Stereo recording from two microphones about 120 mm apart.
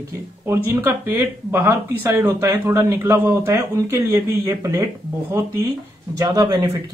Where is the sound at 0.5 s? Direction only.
20° right (ahead or behind).